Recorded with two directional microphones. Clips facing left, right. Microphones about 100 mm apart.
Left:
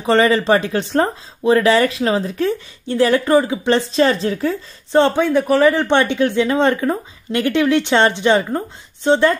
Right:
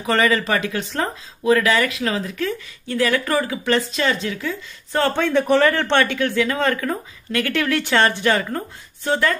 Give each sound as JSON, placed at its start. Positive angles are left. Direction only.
{"t": 0.0, "sound": "speech", "side_deg": 30}
{"t": 5.1, "sound": "speech", "side_deg": 10}